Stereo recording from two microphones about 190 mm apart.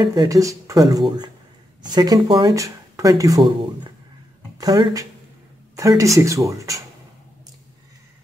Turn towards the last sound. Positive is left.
turn(degrees=-15)  # may be behind; listen again after turning